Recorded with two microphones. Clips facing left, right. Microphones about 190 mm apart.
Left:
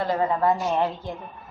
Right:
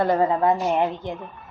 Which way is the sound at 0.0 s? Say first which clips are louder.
Right 4 dB; 50° right (ahead or behind).